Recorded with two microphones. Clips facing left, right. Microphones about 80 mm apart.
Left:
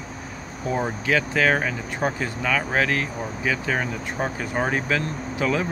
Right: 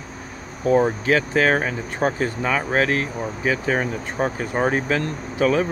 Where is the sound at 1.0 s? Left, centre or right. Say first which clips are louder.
Right 3 dB; right.